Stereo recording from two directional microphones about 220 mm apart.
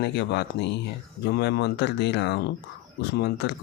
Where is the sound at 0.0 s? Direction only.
50° left (ahead or behind).